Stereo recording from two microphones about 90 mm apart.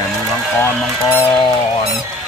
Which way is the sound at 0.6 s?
25° left (ahead or behind).